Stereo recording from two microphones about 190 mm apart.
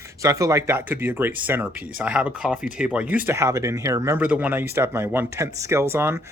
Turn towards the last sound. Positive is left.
turn(degrees=-15)  # may be behind; listen again after turning